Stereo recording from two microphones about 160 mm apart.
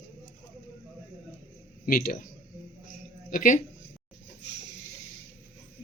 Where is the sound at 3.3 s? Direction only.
55° left (ahead or behind).